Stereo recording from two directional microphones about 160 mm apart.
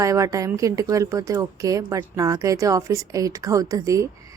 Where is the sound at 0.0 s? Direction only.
20° right (ahead or behind).